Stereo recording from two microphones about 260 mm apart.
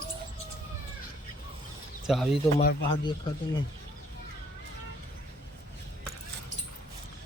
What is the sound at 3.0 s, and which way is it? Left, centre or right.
Speech, centre.